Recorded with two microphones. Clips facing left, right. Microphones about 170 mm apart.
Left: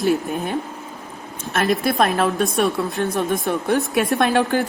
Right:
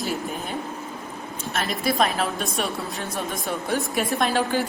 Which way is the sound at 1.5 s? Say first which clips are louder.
Left 5 dB; 55° left (ahead or behind).